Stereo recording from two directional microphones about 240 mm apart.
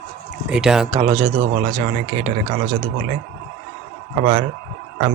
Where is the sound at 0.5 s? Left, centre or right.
Centre.